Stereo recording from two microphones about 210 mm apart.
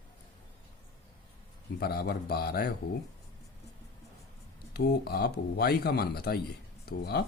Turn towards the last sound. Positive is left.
turn(degrees=50)  # may be behind; listen again after turning